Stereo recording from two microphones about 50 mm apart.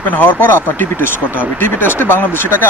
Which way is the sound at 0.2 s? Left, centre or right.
Left.